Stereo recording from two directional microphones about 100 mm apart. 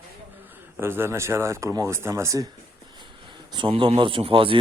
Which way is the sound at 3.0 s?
50° right (ahead or behind).